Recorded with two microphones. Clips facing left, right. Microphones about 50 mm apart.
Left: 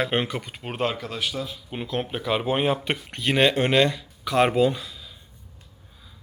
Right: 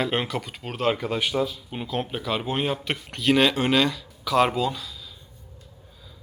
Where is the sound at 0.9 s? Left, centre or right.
Centre.